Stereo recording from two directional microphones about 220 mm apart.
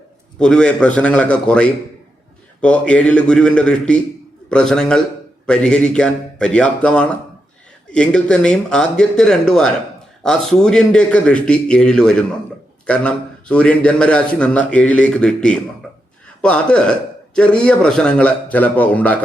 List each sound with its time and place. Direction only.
0.3 s a man's voice: 5° left (ahead or behind)